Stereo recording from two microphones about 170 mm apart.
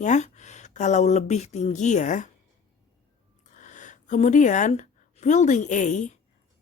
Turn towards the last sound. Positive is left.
turn(degrees=45)  # may be behind; listen again after turning